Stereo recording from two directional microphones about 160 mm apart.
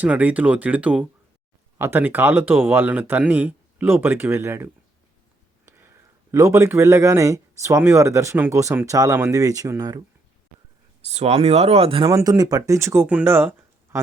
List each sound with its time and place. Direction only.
0.0 s a man's voice: 10° right (ahead or behind)
11.0 s speech: 40° right (ahead or behind)
12.1 s a man's voice: 25° right (ahead or behind)